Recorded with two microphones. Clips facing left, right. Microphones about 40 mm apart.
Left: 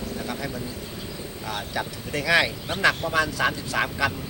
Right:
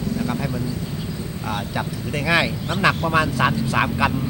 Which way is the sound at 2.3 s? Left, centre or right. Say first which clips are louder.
Right 1 dB; centre.